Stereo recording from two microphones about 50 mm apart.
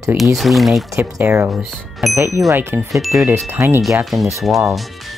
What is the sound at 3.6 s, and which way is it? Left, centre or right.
Speech, right.